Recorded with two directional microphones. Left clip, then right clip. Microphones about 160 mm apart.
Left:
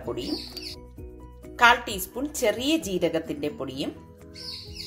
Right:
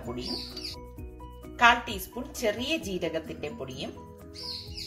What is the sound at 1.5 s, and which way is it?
A woman's voice, 35° left (ahead or behind).